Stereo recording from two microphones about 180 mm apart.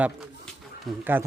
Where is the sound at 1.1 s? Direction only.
10° right (ahead or behind).